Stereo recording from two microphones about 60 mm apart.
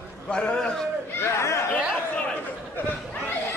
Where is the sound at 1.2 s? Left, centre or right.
Left.